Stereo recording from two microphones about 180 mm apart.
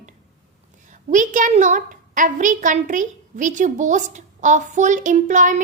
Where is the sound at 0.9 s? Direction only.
45° right (ahead or behind).